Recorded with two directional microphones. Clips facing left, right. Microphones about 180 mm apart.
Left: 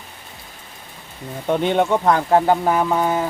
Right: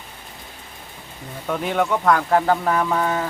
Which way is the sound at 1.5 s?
25° left (ahead or behind).